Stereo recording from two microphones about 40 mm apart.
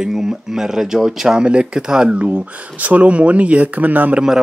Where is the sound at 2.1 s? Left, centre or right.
Right.